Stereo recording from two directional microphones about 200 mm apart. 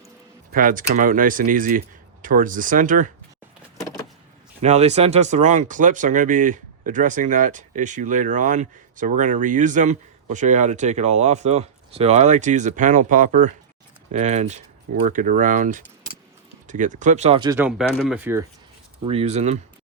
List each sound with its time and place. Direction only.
0.5 s speech: 45° right (ahead or behind)
4.6 s speech: 35° right (ahead or behind)
17.6 s speech: 5° right (ahead or behind)
19.0 s speech: 30° right (ahead or behind)